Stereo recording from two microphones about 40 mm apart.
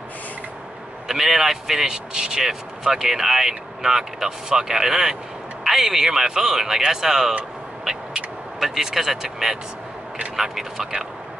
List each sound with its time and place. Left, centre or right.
1.0 s speech: centre
7.8 s vehicle: centre
8.5 s vehicle: centre
8.8 s speech: centre